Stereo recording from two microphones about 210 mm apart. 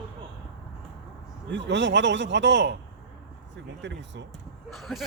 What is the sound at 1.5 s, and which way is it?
A man's voice, 60° right (ahead or behind).